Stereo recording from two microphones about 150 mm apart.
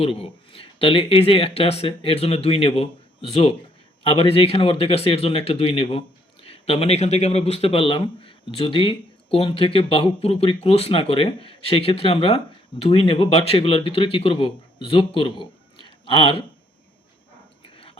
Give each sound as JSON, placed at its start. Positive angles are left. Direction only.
{"t": 0.0, "sound": "speech", "side_deg": 40}